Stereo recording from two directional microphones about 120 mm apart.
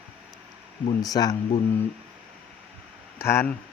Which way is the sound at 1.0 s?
30° left (ahead or behind).